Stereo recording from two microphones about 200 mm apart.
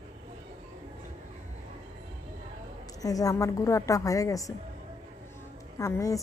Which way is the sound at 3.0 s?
15° left (ahead or behind).